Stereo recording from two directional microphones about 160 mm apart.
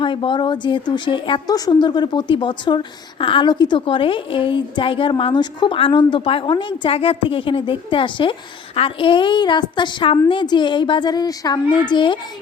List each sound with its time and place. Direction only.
0.0 s a woman's voice: 30° left (ahead or behind)